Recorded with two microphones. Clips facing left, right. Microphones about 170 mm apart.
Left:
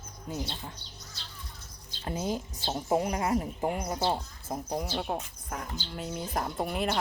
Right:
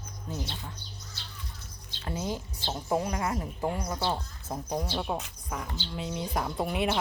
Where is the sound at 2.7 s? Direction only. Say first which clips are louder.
Left 2 dB; 20° left (ahead or behind).